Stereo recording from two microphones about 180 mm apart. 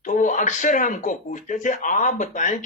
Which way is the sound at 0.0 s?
45° left (ahead or behind).